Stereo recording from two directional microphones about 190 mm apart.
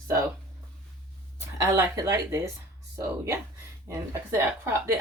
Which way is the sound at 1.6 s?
15° right (ahead or behind).